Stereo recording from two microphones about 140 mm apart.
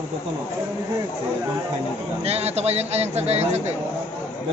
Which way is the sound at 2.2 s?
45° right (ahead or behind).